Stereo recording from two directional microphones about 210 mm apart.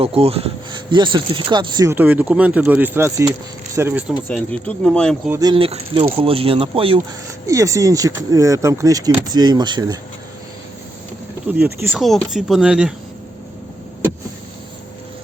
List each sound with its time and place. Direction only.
0.0 s speech: 30° right (ahead or behind); by 4.0 s 10° right (ahead or behind)
4.3 s speech: 5° left (ahead or behind)
5.3 s speech: 20° right (ahead or behind)
7.4 s speech: 15° right (ahead or behind)
11.4 s speech: 5° right (ahead or behind)